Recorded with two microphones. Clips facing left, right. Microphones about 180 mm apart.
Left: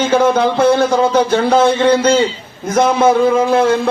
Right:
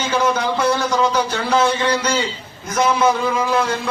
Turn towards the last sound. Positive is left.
turn(degrees=55)  # may be behind; listen again after turning